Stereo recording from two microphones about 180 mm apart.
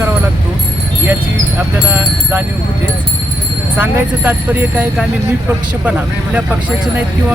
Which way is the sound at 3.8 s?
10° right (ahead or behind).